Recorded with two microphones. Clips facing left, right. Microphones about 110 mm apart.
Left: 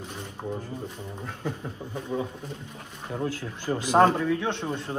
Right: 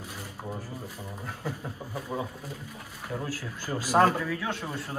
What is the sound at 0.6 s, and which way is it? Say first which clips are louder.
Speech: left 3 dB; 20° left (ahead or behind).